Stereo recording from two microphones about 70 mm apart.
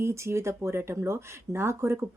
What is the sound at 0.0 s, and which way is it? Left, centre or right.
Speech, right.